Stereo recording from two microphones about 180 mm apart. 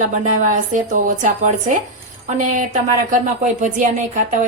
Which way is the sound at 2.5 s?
45° right (ahead or behind).